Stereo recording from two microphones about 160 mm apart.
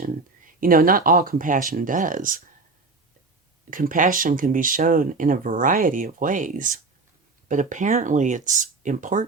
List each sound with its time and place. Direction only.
0.6 s speech: 60° right (ahead or behind)
3.7 s speech: 55° right (ahead or behind)